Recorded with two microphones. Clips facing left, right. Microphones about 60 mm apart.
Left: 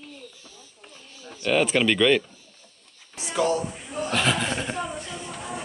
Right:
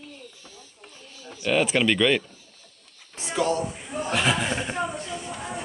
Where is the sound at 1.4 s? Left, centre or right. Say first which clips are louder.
Left 1 dB; centre.